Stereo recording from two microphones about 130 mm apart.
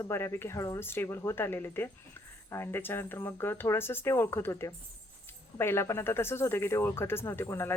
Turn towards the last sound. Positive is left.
turn(degrees=20)  # may be behind; listen again after turning